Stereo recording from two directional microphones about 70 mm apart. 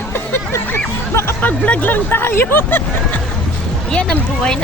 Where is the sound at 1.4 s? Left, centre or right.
Left.